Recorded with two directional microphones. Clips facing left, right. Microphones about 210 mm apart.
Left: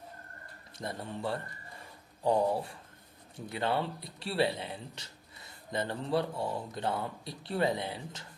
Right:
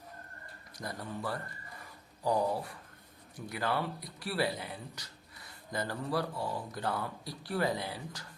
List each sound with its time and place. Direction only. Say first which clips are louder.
0.8 s a man's voice: left 2 dB; 25° left (ahead or behind)